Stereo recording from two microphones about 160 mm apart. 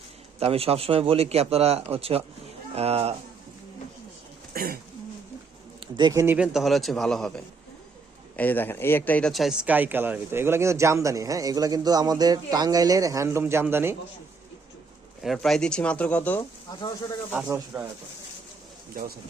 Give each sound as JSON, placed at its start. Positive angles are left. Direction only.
{"t": 0.3, "sound": "speech", "side_deg": -40}
{"t": 4.5, "sound": "throat clearing", "side_deg": -65}
{"t": 5.8, "sound": "speech", "side_deg": -25}
{"t": 6.3, "sound": "speech", "side_deg": -5}
{"t": 15.2, "sound": "speech", "side_deg": 0}
{"t": 17.7, "sound": "speech", "side_deg": -10}